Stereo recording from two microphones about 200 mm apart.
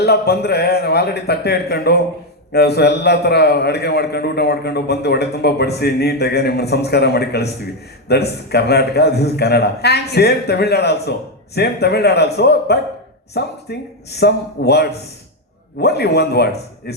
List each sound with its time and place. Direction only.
0.0 s a man's voice: 50° left (ahead or behind)